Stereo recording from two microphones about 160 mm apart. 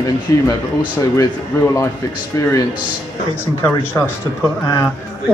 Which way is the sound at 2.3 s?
20° left (ahead or behind).